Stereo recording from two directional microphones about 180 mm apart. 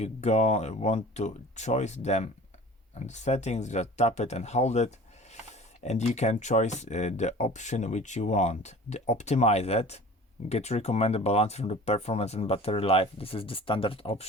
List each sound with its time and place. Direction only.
0.0 s speech: 40° left (ahead or behind)